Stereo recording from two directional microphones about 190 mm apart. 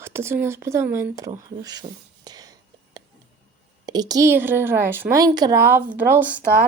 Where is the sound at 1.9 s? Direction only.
30° right (ahead or behind).